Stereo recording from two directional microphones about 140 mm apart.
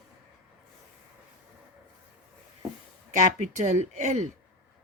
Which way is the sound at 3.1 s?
60° right (ahead or behind).